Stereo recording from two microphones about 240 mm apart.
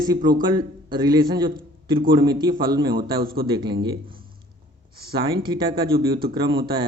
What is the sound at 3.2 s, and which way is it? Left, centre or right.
Speech, right.